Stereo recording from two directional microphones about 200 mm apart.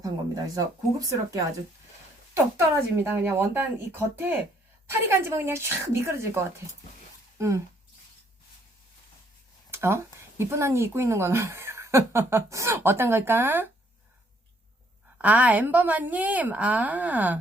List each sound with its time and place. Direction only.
0.5 s speech: 15° right (ahead or behind)
9.7 s speech: 10° right (ahead or behind)
15.2 s speech: 5° right (ahead or behind)